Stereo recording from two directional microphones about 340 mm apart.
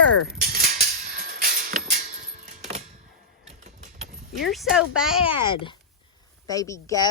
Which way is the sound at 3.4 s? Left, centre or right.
Centre.